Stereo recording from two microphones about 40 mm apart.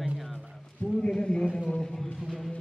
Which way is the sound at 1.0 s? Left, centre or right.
Left.